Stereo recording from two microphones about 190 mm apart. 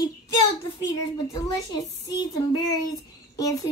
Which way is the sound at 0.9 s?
20° left (ahead or behind).